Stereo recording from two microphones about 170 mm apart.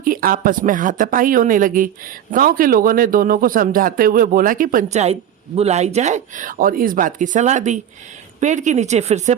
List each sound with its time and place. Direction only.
0.0 s a man's voice: 55° right (ahead or behind); by 9.3 s 40° right (ahead or behind)